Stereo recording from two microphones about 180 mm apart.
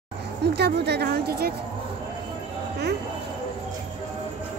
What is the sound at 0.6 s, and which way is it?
Speech, 65° right (ahead or behind).